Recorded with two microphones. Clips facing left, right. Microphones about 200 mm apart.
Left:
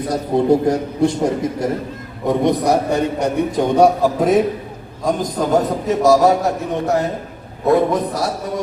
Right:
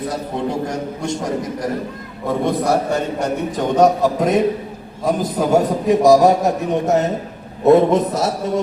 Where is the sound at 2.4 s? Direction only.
15° left (ahead or behind).